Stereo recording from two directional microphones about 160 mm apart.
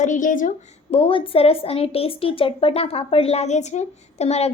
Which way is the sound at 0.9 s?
35° left (ahead or behind).